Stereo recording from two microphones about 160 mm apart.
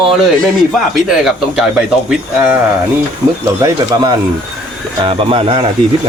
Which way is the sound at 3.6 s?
25° right (ahead or behind).